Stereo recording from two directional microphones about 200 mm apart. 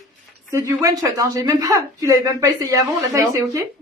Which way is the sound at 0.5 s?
15° right (ahead or behind).